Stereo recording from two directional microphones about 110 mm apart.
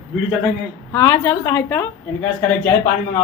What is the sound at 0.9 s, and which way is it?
Speech, 40° left (ahead or behind).